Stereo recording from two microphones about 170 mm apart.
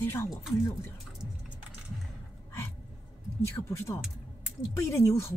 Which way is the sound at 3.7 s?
15° left (ahead or behind).